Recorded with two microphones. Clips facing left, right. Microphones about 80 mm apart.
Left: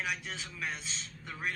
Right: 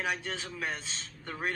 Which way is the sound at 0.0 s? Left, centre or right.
Right.